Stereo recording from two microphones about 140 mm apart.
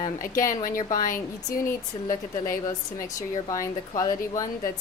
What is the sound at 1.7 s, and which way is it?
Speech, 20° left (ahead or behind).